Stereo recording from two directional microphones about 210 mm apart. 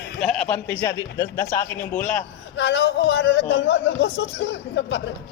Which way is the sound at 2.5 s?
55° left (ahead or behind).